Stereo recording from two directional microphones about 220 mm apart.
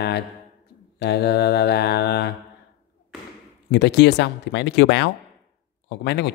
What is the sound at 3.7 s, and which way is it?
Speech, 50° left (ahead or behind).